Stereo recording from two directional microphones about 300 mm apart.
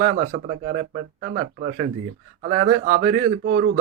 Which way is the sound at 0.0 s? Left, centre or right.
Right.